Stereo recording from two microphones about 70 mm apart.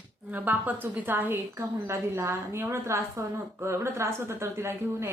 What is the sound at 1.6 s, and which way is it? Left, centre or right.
A woman's voice, right.